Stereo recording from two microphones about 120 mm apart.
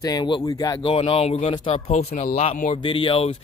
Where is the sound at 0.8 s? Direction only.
50° left (ahead or behind).